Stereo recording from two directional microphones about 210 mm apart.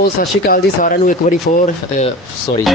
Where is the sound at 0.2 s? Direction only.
40° left (ahead or behind).